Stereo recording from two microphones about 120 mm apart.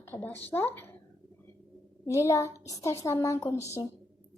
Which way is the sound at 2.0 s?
25° left (ahead or behind).